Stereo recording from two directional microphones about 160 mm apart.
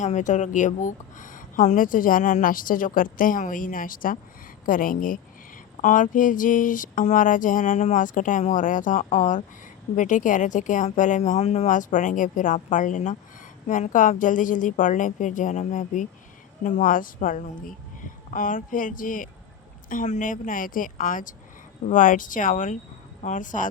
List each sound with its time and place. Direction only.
0.0 s a woman's voice: 50° left (ahead or behind)